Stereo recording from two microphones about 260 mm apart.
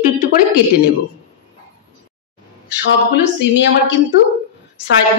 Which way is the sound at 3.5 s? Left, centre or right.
Left.